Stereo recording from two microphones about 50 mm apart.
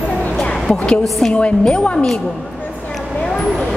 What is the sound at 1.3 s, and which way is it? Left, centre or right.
Speech, left.